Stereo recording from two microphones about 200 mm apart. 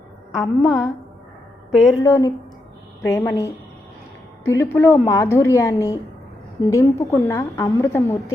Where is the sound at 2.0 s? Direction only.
15° left (ahead or behind).